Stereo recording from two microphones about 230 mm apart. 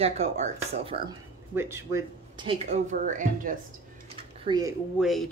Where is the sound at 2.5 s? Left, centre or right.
Right.